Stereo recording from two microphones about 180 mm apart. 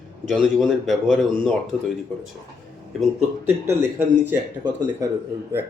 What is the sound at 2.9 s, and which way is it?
Speech, centre (ahead or behind).